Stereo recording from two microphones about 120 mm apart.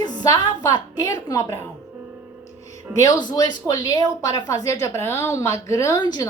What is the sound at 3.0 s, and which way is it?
A woman's voice, 35° left (ahead or behind).